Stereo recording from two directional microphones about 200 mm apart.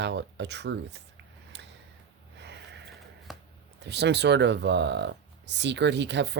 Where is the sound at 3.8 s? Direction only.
55° right (ahead or behind).